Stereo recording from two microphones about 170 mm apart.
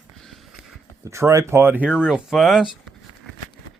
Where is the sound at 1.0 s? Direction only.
15° right (ahead or behind); by 2.9 s centre (ahead or behind).